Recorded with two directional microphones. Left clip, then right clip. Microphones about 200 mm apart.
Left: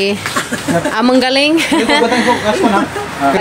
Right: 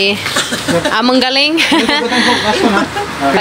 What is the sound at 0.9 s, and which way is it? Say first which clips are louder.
A woman's voice: left 1 dB; centre (ahead or behind).